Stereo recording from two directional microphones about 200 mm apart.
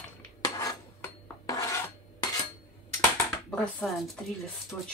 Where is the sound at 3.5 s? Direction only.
5° left (ahead or behind).